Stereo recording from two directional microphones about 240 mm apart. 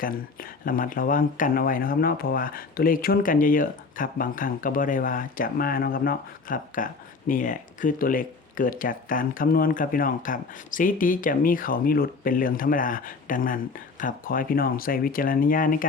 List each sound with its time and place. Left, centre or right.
0.0 s speech: left